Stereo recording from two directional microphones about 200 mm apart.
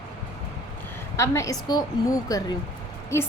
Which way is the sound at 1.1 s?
15° left (ahead or behind).